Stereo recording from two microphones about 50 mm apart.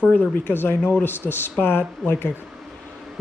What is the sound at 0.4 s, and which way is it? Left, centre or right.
Speech, left.